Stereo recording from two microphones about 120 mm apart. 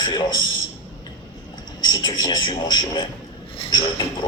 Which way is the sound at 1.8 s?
35° left (ahead or behind).